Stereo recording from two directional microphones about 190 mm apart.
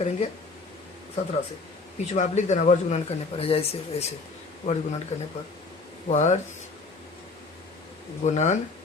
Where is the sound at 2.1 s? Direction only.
40° left (ahead or behind).